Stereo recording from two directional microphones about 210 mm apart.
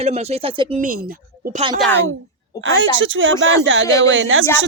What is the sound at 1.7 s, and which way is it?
Speech, 5° left (ahead or behind).